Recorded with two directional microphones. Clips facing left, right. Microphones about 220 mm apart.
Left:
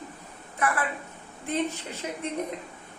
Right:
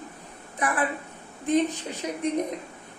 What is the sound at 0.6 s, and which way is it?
A woman's voice, 15° right (ahead or behind).